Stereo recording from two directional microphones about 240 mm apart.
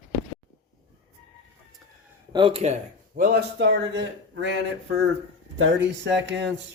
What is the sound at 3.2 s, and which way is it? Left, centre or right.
Speech, right.